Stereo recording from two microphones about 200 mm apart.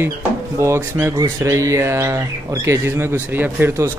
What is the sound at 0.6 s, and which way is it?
Speech, 10° right (ahead or behind).